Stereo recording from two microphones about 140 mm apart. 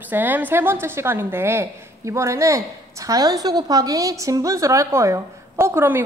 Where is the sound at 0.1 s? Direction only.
15° right (ahead or behind).